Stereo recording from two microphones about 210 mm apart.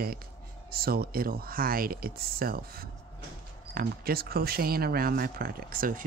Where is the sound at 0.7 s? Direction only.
45° right (ahead or behind).